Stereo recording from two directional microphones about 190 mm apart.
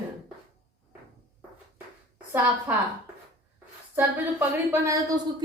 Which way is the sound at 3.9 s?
10° right (ahead or behind).